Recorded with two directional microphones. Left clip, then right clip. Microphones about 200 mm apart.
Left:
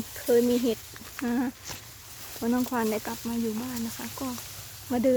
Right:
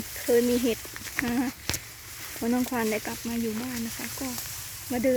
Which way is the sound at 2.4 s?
Centre (ahead or behind).